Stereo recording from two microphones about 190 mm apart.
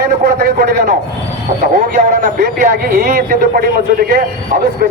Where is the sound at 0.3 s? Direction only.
55° right (ahead or behind).